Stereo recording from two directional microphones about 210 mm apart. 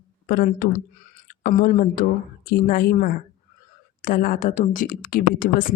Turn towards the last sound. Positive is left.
turn(degrees=40)  # may be behind; listen again after turning